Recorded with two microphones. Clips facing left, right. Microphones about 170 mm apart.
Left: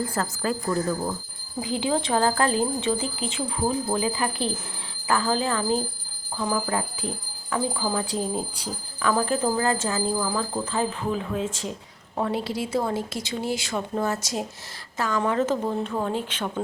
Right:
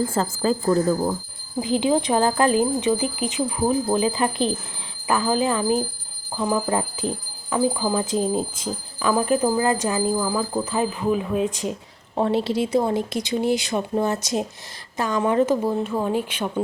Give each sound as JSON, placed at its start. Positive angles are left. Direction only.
{"t": 0.1, "sound": "a woman's voice", "side_deg": -25}
{"t": 1.6, "sound": "a woman's voice", "side_deg": -20}